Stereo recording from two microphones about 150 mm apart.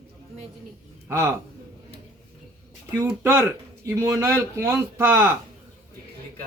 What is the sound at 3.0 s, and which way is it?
A man's voice, 20° right (ahead or behind).